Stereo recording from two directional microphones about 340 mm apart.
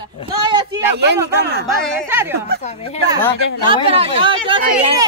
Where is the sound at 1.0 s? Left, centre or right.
Right.